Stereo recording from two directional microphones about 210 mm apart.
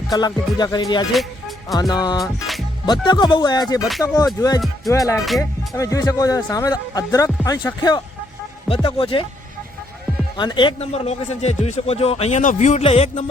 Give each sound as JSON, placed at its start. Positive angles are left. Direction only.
{"t": 0.1, "sound": "speech", "side_deg": 20}
{"t": 2.2, "sound": "music", "side_deg": 0}
{"t": 2.8, "sound": "speech", "side_deg": 20}
{"t": 10.3, "sound": "speech", "side_deg": 20}